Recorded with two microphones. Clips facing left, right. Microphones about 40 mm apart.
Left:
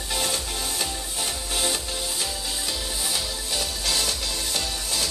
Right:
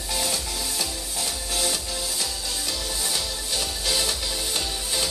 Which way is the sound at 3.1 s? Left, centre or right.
Centre.